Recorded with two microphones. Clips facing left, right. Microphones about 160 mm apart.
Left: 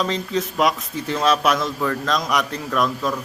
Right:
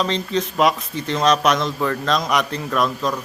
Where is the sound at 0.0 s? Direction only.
5° left (ahead or behind).